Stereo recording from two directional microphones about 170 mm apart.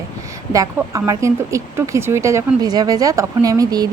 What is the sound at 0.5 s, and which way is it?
Speech, 20° right (ahead or behind).